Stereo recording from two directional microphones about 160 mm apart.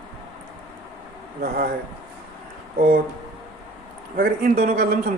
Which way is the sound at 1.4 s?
70° right (ahead or behind).